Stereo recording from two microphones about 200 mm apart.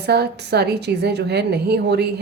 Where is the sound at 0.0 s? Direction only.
55° right (ahead or behind).